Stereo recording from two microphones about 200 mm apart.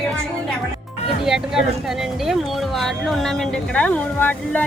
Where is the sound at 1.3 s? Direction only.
Centre (ahead or behind).